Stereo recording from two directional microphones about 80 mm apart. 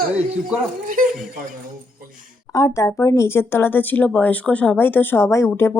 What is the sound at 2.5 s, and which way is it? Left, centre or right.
Speech, left.